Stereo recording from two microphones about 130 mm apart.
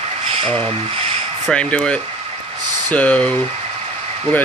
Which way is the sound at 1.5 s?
5° left (ahead or behind).